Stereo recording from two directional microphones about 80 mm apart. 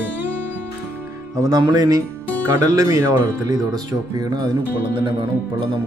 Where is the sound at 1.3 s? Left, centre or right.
Right.